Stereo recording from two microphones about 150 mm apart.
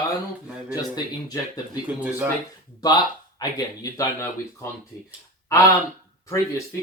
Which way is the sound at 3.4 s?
25° left (ahead or behind).